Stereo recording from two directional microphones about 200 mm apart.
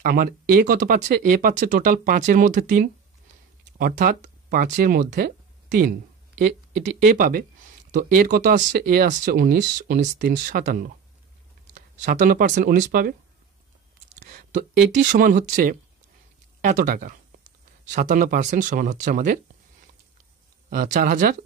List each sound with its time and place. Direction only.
0.0 s speech: 45° right (ahead or behind)
14.2 s speech: 40° right (ahead or behind)
20.7 s speech: 45° right (ahead or behind)